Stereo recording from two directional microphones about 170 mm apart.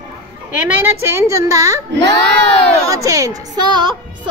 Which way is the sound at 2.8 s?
20° right (ahead or behind).